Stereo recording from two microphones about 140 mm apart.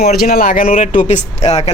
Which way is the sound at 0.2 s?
90° left.